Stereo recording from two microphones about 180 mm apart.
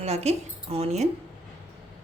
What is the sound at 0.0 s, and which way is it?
A woman's voice, 35° right (ahead or behind).